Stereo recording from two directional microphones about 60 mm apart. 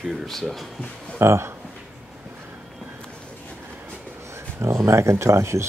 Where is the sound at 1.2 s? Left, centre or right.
Right.